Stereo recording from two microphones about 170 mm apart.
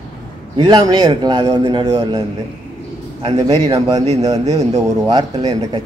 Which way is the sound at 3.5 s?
20° right (ahead or behind).